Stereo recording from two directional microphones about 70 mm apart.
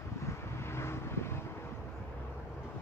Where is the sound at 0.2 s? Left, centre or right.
Left.